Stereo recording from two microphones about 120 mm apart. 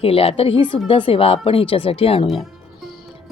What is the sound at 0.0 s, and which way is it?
Speech, 55° left (ahead or behind).